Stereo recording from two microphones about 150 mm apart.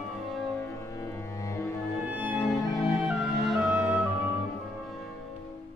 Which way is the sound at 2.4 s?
20° left (ahead or behind).